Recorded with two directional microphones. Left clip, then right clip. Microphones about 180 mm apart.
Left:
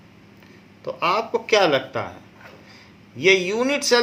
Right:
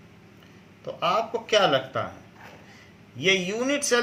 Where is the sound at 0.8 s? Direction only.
35° left (ahead or behind).